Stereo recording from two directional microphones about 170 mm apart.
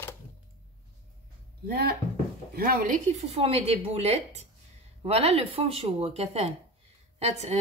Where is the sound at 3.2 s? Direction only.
35° right (ahead or behind).